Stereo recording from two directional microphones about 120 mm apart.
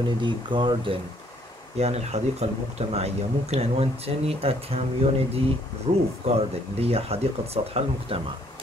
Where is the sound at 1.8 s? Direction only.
60° right (ahead or behind).